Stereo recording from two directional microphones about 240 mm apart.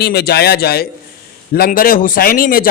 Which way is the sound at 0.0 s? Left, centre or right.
Left.